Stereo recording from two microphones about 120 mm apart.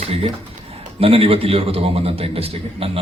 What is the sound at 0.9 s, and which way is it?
Speech, 55° right (ahead or behind).